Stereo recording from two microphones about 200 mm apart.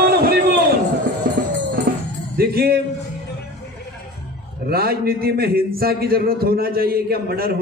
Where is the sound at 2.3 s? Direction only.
50° right (ahead or behind).